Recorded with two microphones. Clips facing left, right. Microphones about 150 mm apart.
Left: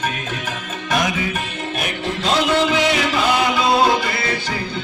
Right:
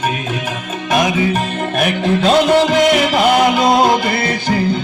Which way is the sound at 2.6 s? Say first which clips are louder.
Right 6 dB; 45° right (ahead or behind).